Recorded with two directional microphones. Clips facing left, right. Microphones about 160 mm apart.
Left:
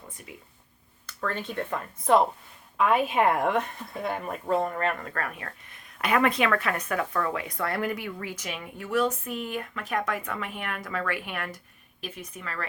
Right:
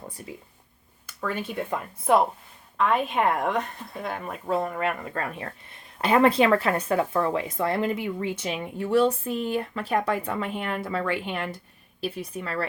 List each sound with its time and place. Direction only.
0.2 s speech: 30° right (ahead or behind)
1.0 s speech: 10° right (ahead or behind)
2.7 s speech: 5° left (ahead or behind); by 12.6 s 35° right (ahead or behind)